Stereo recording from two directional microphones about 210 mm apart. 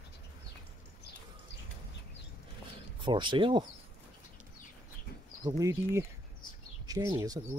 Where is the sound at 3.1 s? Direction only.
20° right (ahead or behind).